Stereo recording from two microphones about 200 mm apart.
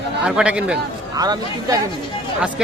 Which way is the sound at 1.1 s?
20° right (ahead or behind).